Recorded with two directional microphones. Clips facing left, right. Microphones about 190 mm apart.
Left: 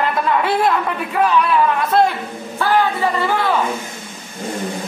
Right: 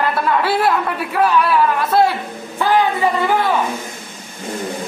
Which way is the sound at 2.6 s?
15° right (ahead or behind).